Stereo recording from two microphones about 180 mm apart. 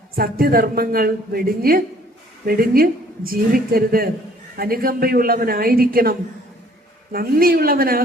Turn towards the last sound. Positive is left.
turn(degrees=-55)  # may be behind; listen again after turning